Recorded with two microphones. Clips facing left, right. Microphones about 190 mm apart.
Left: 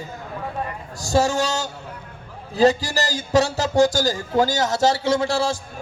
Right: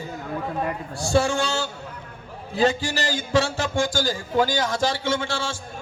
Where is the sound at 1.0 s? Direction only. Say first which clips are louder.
Left 2 dB; 40° left (ahead or behind).